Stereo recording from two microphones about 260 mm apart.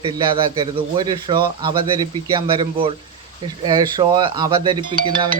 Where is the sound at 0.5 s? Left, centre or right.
Centre.